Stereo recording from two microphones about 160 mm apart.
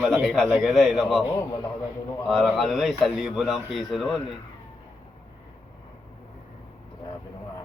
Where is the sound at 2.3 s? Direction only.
Centre (ahead or behind).